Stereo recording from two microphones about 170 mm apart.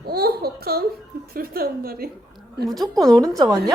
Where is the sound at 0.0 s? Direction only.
65° right (ahead or behind).